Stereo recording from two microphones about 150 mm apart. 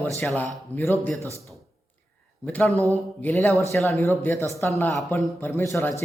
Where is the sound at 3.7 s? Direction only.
20° left (ahead or behind).